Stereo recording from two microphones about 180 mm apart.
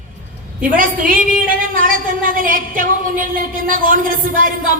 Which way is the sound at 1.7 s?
50° right (ahead or behind).